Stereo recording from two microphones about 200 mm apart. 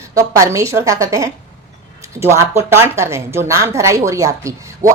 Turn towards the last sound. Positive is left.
turn(degrees=-15)  # may be behind; listen again after turning